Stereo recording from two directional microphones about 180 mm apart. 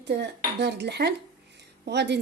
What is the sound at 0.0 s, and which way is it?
Speech, 70° right (ahead or behind).